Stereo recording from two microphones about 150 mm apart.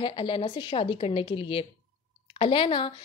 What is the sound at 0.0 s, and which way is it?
Speech, 35° left (ahead or behind).